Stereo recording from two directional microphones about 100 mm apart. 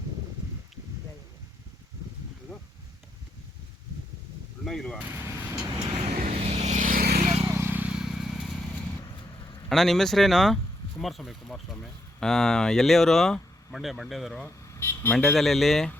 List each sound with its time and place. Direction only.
4.6 s speech: 5° left (ahead or behind)
4.9 s speech: 15° right (ahead or behind)
5.2 s vehicle: 25° right (ahead or behind)
5.7 s vehicle: 60° right (ahead or behind); by 7.4 s 85° right
7.4 s vehicle: 25° right (ahead or behind); by 8.6 s centre (ahead or behind)
9.6 s speech: 5° left (ahead or behind)
14.4 s vehicle: 25° left (ahead or behind)
15.3 s speech: centre (ahead or behind)